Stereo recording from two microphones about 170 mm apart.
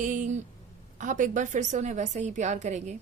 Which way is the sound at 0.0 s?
45° right (ahead or behind).